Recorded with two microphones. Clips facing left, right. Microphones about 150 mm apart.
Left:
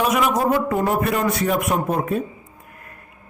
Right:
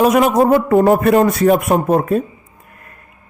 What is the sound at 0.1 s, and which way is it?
A man's voice, 50° right (ahead or behind).